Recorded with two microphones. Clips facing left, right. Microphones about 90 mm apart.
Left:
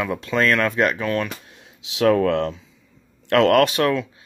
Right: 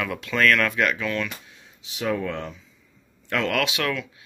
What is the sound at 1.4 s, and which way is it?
Speech, 65° left (ahead or behind).